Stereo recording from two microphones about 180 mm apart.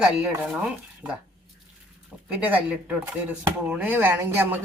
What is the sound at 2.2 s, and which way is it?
Speech, 10° right (ahead or behind).